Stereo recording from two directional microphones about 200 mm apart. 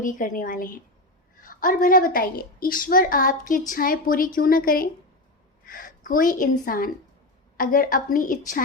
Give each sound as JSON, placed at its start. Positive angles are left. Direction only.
{"t": 0.0, "sound": "a woman's voice", "side_deg": 40}